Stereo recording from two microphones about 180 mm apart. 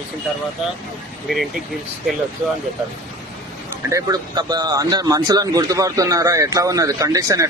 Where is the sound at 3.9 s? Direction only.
20° right (ahead or behind).